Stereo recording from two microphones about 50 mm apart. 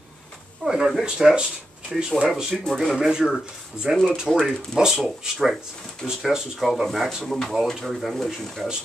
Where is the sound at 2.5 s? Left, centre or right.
Centre.